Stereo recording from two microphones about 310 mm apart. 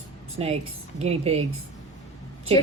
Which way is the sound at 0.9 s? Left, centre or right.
Centre.